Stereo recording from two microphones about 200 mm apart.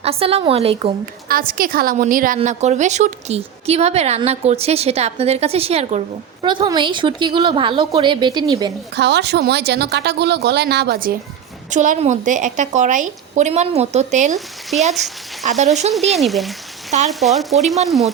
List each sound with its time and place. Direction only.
0.0 s a woman's voice: 30° right (ahead or behind)
1.3 s a woman's voice: 45° right (ahead or behind); by 8.7 s 20° right (ahead or behind)
9.0 s a woman's voice: 55° right (ahead or behind); by 14.3 s 35° right (ahead or behind)
15.4 s a woman's voice: 35° right (ahead or behind)
15.9 s speech: centre (ahead or behind)